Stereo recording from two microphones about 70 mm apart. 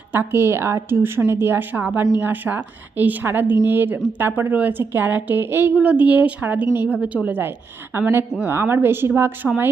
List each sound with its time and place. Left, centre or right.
0.1 s a woman's voice: right
1.7 s a woman's voice: right